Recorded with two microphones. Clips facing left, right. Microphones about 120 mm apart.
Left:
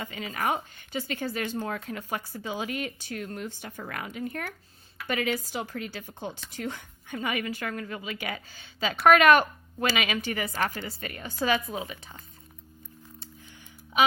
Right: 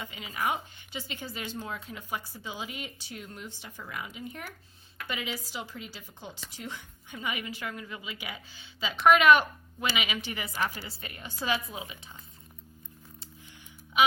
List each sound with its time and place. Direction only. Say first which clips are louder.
0.1 s speech: left 2 dB; 45° left (ahead or behind)